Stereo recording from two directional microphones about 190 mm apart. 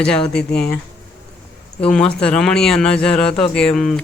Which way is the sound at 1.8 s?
5° left (ahead or behind).